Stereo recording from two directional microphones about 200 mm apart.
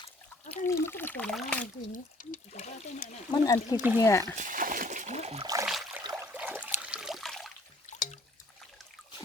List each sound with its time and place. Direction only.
0.6 s speech: 10° left (ahead or behind)
1.9 s speech: 40° left (ahead or behind)
3.3 s speech: 20° left (ahead or behind)
4.4 s speech: 40° right (ahead or behind)
5.6 s a sound: centre (ahead or behind)
6.0 s a sound: 20° right (ahead or behind)
6.3 s water: 10° right (ahead or behind)
6.7 s a sound: 5° right (ahead or behind)
7.9 s drip: 35° left (ahead or behind)